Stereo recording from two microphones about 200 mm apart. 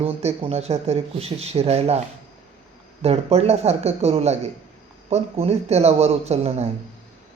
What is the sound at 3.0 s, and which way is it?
Speech, 30° right (ahead or behind).